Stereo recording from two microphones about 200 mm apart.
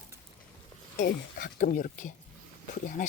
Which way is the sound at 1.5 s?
45° left (ahead or behind).